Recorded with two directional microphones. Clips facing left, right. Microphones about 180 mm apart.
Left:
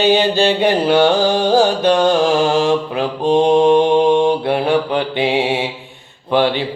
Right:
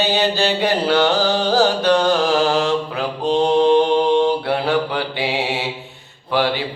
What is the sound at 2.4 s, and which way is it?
Mantra, 15° left (ahead or behind).